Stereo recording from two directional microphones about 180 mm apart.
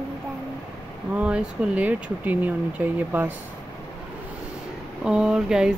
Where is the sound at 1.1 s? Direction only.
5° right (ahead or behind).